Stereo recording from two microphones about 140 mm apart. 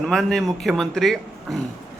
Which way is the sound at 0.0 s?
5° left (ahead or behind).